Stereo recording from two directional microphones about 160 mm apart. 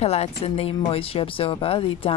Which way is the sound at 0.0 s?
40° left (ahead or behind).